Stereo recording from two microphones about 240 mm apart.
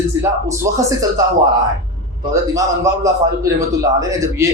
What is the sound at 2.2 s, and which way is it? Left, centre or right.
A man's voice, centre.